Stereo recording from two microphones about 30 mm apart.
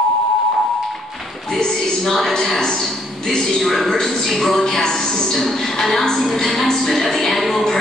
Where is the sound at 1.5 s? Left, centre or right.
Centre.